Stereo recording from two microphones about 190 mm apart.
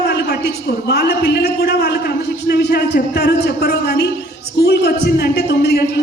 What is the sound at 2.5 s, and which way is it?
A man's voice, 60° left (ahead or behind).